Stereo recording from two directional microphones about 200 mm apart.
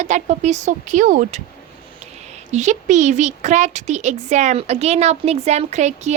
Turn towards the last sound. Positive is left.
turn(degrees=-35)  # may be behind; listen again after turning